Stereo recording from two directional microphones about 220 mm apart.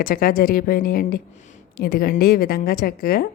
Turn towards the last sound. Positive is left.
turn(degrees=40)  # may be behind; listen again after turning